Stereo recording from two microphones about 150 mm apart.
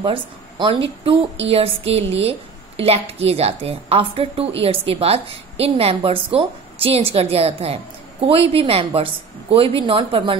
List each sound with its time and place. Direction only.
0.0 s a woman's voice: 35° right (ahead or behind)